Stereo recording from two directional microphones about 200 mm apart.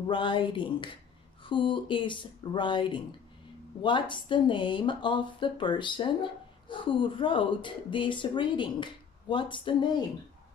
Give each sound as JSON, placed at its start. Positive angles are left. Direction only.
{"t": 0.1, "sound": "speech", "side_deg": 25}